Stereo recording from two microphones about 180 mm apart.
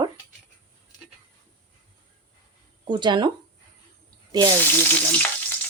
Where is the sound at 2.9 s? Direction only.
25° right (ahead or behind).